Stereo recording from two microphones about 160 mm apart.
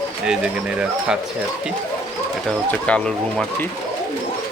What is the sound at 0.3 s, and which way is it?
Speech, 5° right (ahead or behind).